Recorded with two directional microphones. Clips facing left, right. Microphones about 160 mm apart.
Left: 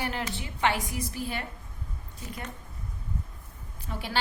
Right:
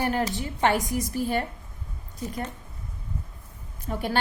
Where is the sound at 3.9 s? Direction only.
45° right (ahead or behind).